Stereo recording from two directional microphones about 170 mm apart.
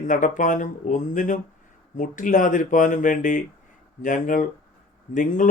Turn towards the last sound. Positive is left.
turn(degrees=50)  # may be behind; listen again after turning